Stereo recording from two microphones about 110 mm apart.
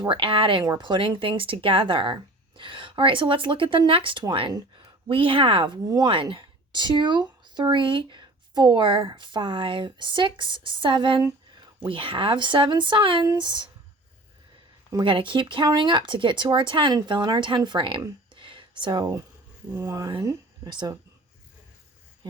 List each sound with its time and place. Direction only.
0.0 s speech: 50° right (ahead or behind)
15.0 s speech: 50° right (ahead or behind)
18.3 s a sound: 50° right (ahead or behind)
19.8 s speech: 35° right (ahead or behind)